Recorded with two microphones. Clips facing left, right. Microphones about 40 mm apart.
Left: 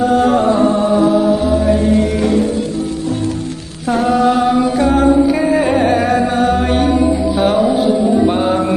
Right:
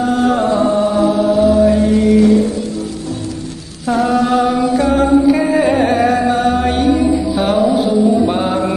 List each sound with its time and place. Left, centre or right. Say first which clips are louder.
0.3 s music: left 1 dB; left
1.0 s music: right 1 dB; centre
1.8 s music: right 3 dB; left
4.0 s mantra: left 1 dB; centre
4.9 s music: right 1 dB; centre